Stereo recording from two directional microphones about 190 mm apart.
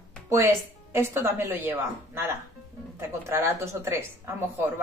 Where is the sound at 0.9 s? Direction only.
15° right (ahead or behind).